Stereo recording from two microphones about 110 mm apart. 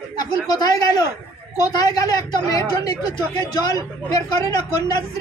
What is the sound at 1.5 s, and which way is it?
Speech, 35° left (ahead or behind).